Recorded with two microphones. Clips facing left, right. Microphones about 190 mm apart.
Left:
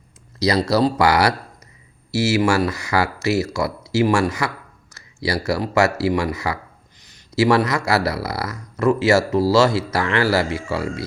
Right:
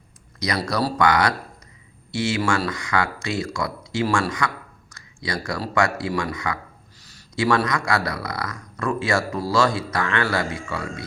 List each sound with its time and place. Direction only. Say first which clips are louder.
0.3 s speech: left 7 dB; 30° left (ahead or behind)
2.3 s speech: left 6 dB; 20° left (ahead or behind)